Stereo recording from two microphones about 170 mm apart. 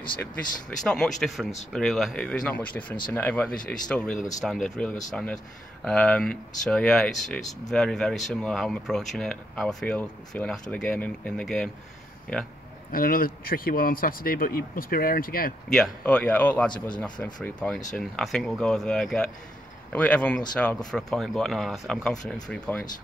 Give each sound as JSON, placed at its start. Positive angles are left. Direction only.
{"t": 0.2, "sound": "speech", "side_deg": 5}
{"t": 12.9, "sound": "speech", "side_deg": 55}
{"t": 15.7, "sound": "speech", "side_deg": 5}